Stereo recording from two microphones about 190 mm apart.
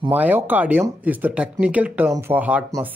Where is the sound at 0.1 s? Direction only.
10° right (ahead or behind).